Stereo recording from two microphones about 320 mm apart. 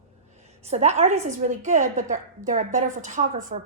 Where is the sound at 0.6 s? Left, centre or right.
Right.